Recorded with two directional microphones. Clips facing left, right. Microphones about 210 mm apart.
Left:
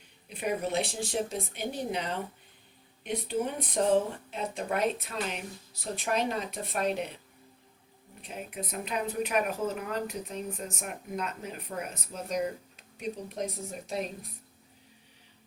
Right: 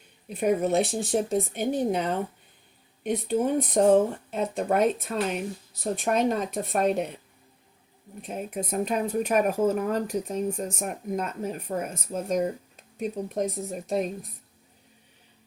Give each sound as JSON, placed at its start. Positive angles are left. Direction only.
{"t": 0.3, "sound": "speech", "side_deg": -45}
{"t": 8.2, "sound": "speech", "side_deg": -45}